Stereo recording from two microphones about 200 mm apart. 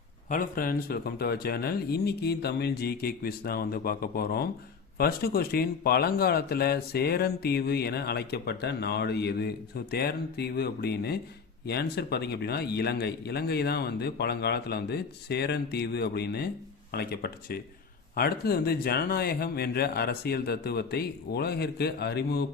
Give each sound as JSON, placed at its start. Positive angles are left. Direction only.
{"t": 0.3, "sound": "a man's voice", "side_deg": 45}